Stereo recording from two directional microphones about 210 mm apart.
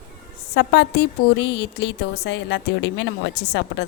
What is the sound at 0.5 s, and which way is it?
A woman's voice, 55° left (ahead or behind).